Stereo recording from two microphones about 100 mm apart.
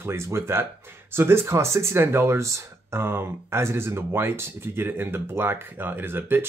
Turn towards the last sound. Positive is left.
turn(degrees=-20)  # may be behind; listen again after turning